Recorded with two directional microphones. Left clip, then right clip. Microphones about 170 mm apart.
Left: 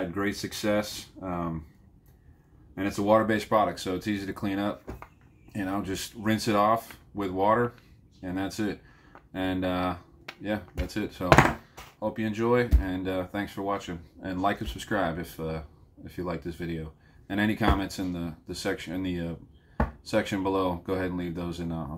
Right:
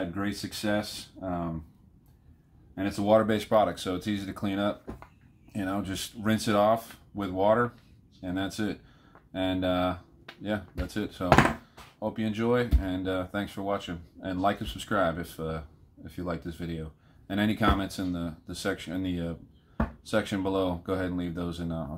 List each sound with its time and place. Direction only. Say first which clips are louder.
0.1 s speech: left 3 dB; 15° right (ahead or behind)
2.7 s speech: even; 15° right (ahead or behind)